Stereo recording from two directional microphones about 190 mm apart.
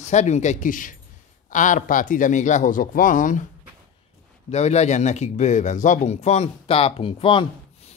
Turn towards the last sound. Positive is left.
turn(degrees=30)  # may be behind; listen again after turning